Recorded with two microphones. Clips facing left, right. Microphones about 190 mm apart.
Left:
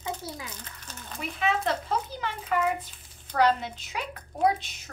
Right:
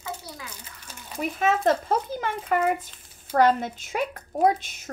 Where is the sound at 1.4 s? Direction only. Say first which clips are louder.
Right 5 dB; 45° right (ahead or behind).